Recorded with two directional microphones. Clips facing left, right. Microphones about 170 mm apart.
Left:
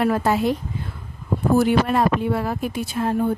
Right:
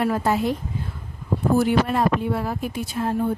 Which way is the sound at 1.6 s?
70° left (ahead or behind).